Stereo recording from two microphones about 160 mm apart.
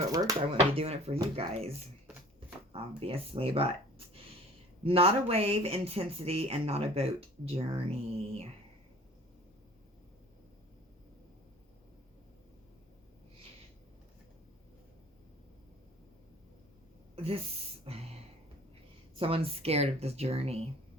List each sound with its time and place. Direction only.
0.1 s speech: 25° right (ahead or behind)
0.7 s speech: 40° right (ahead or behind)
2.7 s speech: 35° right (ahead or behind)
17.2 s a sound: 35° right (ahead or behind)
19.1 s speech: 35° right (ahead or behind)